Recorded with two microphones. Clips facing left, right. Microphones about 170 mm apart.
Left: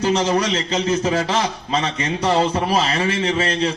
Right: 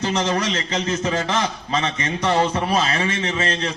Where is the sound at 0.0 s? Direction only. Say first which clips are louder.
Left 3 dB; 10° left (ahead or behind).